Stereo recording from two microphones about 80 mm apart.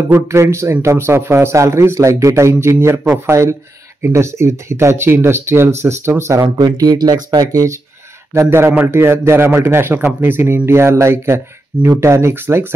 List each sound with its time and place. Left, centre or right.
0.3 s speech: right
6.5 s speech: right
8.3 s speech: right
8.6 s a man's voice: right
8.9 s speech: right